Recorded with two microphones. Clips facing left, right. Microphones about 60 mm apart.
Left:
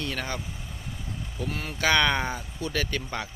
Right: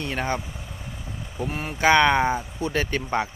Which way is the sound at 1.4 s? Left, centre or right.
Right.